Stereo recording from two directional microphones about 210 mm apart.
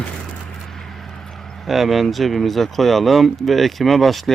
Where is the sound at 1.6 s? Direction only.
Centre (ahead or behind).